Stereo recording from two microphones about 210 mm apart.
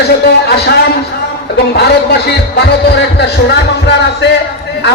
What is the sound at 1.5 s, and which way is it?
Speech, 50° left (ahead or behind).